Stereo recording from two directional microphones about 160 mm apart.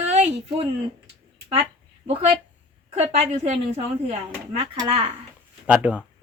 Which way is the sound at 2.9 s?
40° right (ahead or behind).